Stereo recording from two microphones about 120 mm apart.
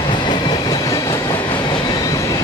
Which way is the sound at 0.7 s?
25° left (ahead or behind).